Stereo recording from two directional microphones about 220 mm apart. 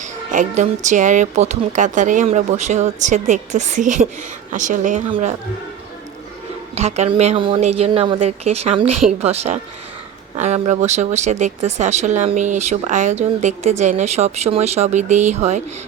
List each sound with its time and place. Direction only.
0.0 s speech: 35° right (ahead or behind)
5.0 s speech: 25° right (ahead or behind)
6.7 s speech: 30° right (ahead or behind)